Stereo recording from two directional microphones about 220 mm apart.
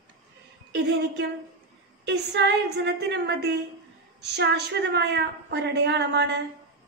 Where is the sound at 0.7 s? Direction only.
50° right (ahead or behind).